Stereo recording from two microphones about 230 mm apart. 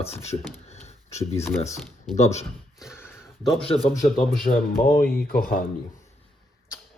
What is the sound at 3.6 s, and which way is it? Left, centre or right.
Speech, left.